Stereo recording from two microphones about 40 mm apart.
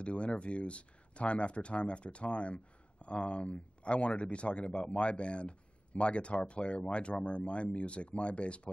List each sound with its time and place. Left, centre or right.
0.0 s speech: left